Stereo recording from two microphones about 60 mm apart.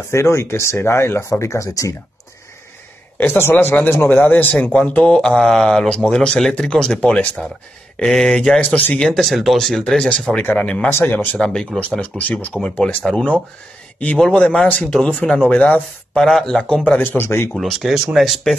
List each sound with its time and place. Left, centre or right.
0.1 s speech: left
3.2 s a man's voice: left
4.7 s speech: centre
9.0 s speech: centre
10.0 s speech: centre
10.9 s a man's voice: left
11.3 s speech: centre
12.0 s speech: left
12.6 s a man's voice: centre
16.2 s speech: centre
17.0 s a man's voice: left
17.6 s speech: centre